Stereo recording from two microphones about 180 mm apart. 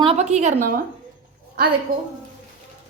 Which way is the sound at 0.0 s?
35° right (ahead or behind).